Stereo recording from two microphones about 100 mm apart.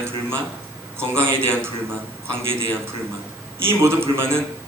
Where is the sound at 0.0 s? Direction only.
25° right (ahead or behind).